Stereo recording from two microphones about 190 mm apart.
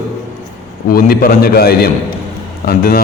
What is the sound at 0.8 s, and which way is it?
A man's voice, 50° left (ahead or behind).